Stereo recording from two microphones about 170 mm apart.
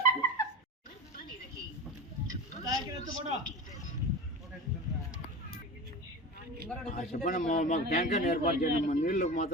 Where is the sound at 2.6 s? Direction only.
20° right (ahead or behind).